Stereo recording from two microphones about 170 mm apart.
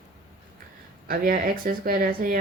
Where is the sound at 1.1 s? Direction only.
60° right (ahead or behind).